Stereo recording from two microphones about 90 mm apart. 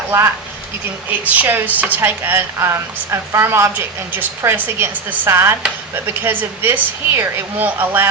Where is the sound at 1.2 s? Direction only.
20° right (ahead or behind).